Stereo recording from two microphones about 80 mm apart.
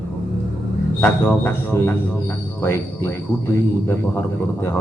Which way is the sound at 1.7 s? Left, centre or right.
Left.